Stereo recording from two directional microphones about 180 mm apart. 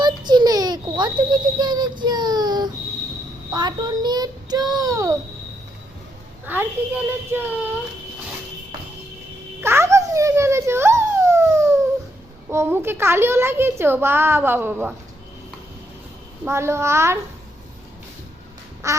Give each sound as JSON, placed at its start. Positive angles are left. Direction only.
{"t": 0.0, "sound": "a sound", "side_deg": -25}
{"t": 3.5, "sound": "a child's voice", "side_deg": -25}
{"t": 6.4, "sound": "a child's voice", "side_deg": -10}
{"t": 9.6, "sound": "a sound", "side_deg": -15}
{"t": 12.5, "sound": "a child's voice", "side_deg": -15}
{"t": 16.4, "sound": "a child's voice", "side_deg": -15}
{"t": 18.8, "sound": "duck", "side_deg": -15}